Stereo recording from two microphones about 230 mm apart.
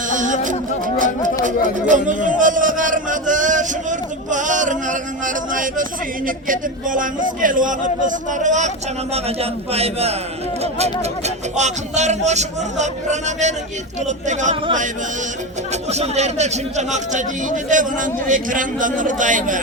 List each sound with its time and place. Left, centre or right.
0.1 s music: right
1.9 s a sound: right
6.2 s a man's voice: right
15.9 s a man's voice: right